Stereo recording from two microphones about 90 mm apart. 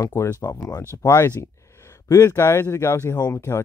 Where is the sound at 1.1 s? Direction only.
30° left (ahead or behind).